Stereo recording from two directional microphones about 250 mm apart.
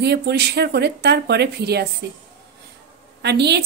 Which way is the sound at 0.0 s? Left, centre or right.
Right.